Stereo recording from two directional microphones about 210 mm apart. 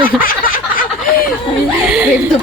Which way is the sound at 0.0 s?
40° left (ahead or behind).